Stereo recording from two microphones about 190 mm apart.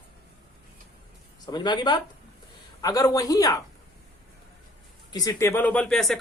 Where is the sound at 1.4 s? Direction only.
25° left (ahead or behind).